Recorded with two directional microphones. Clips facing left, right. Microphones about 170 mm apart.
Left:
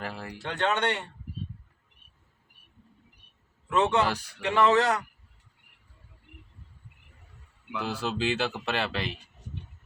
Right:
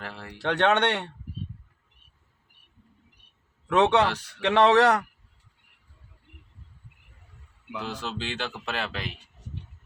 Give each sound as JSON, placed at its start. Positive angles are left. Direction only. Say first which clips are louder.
{"t": 0.0, "sound": "speech", "louder": "left 3 dB", "side_deg": 10}
{"t": 0.3, "sound": "speech", "louder": "right 6 dB", "side_deg": -70}
{"t": 3.7, "sound": "speech", "louder": "right 4 dB", "side_deg": -70}
{"t": 4.1, "sound": "speech", "louder": "left 2 dB", "side_deg": 10}
{"t": 4.4, "sound": "speech", "louder": "right 4 dB", "side_deg": -75}
{"t": 7.8, "sound": "speech", "louder": "left 3 dB", "side_deg": 10}